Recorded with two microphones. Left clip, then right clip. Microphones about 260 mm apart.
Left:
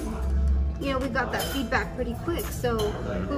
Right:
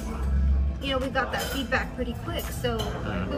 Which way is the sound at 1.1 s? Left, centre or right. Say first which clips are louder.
Even; centre.